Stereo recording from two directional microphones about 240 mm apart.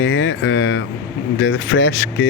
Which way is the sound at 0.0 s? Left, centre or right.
Left.